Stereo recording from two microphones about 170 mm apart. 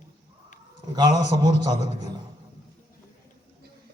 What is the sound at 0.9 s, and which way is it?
Speech, 25° right (ahead or behind).